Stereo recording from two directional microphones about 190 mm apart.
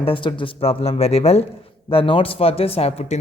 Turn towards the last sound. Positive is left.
turn(degrees=30)  # may be behind; listen again after turning